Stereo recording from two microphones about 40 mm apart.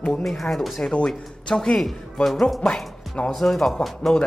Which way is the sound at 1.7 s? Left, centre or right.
Left.